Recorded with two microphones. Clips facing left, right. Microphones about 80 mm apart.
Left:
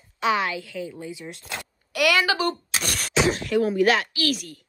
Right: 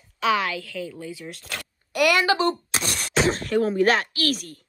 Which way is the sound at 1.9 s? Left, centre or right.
Right.